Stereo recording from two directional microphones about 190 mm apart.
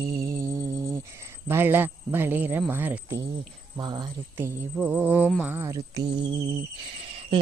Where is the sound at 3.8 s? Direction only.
20° right (ahead or behind).